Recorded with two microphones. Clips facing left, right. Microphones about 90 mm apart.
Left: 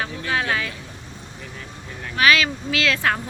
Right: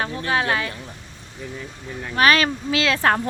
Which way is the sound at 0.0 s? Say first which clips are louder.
Right 2 dB; 40° right (ahead or behind).